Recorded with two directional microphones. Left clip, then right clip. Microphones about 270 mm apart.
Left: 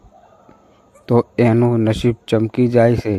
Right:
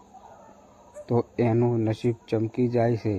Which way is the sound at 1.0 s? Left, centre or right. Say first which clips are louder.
Left 10 dB; left.